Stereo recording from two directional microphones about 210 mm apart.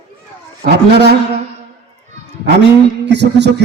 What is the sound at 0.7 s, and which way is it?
Speech, 50° right (ahead or behind).